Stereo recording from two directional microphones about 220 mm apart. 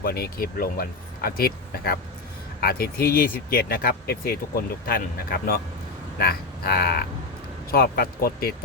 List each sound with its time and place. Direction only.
0.0 s speech: 45° left (ahead or behind)